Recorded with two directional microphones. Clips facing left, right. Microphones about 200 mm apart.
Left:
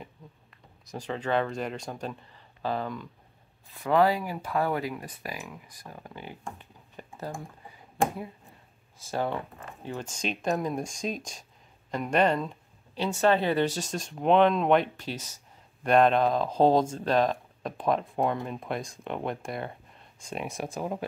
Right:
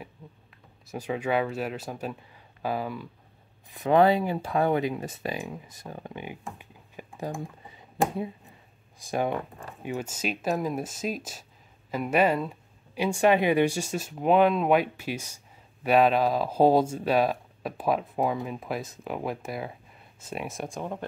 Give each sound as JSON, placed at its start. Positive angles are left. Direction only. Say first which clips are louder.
{"t": 0.8, "sound": "speech", "louder": "right 2 dB", "side_deg": -10}
{"t": 3.7, "sound": "speech", "louder": "right 3 dB", "side_deg": -20}
{"t": 6.4, "sound": "computer keyboard", "louder": "even", "side_deg": -10}
{"t": 9.0, "sound": "speech", "louder": "right 2 dB", "side_deg": -15}